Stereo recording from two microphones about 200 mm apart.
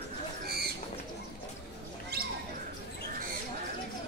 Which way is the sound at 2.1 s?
50° right (ahead or behind).